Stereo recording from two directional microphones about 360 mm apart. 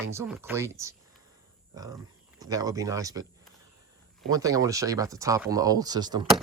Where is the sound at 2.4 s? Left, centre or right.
Centre.